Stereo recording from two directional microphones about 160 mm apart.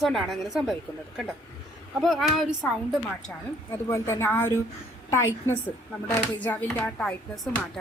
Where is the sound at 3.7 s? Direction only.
15° left (ahead or behind).